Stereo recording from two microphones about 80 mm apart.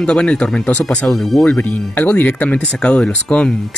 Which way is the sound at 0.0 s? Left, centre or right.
Centre.